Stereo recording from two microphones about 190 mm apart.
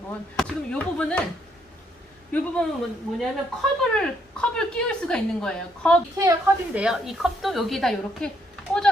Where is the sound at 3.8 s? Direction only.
5° left (ahead or behind).